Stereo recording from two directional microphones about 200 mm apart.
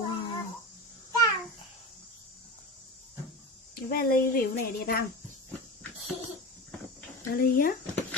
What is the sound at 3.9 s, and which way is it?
Speech, 50° left (ahead or behind).